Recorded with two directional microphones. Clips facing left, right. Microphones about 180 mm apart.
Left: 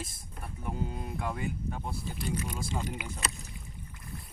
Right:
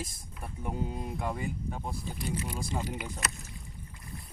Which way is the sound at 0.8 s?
Centre (ahead or behind).